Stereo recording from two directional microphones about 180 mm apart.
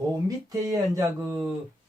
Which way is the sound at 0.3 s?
20° right (ahead or behind).